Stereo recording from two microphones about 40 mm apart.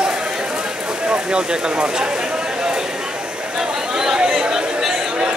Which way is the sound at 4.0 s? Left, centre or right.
Centre.